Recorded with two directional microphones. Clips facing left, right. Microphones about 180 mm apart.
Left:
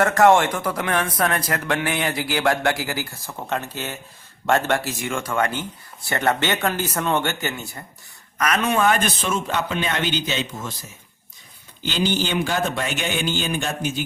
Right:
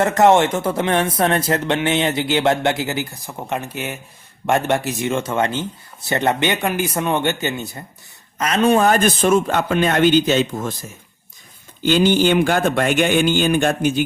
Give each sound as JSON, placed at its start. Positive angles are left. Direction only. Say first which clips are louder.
{"t": 0.0, "sound": "a man's voice", "louder": "right 2 dB", "side_deg": -20}
{"t": 11.8, "sound": "speech", "louder": "right 8 dB", "side_deg": -55}